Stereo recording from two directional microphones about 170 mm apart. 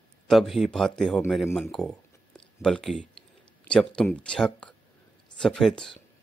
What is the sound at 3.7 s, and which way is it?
Speech, 5° left (ahead or behind).